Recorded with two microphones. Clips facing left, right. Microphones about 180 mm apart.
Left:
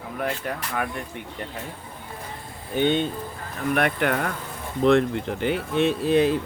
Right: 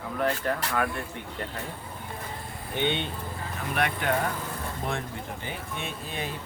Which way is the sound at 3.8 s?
55° left (ahead or behind).